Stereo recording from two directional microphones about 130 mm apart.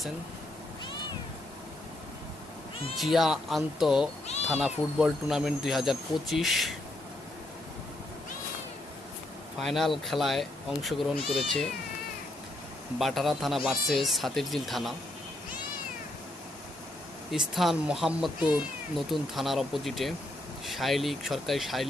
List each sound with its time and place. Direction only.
3.0 s speech: centre (ahead or behind)
9.6 s speech: centre (ahead or behind)
13.0 s speech: centre (ahead or behind)
17.3 s speech: centre (ahead or behind)